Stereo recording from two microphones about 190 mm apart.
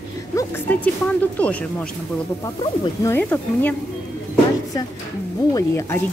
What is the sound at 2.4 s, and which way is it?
Speech, 20° left (ahead or behind).